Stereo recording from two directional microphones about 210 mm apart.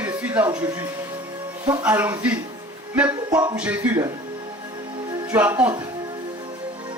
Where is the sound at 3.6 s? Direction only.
5° right (ahead or behind).